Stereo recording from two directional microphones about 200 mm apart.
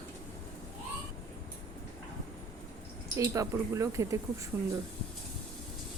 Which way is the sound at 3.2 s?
15° right (ahead or behind).